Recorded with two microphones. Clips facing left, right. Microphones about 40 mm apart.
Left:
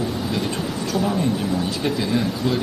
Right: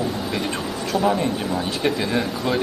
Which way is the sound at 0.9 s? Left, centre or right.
Right.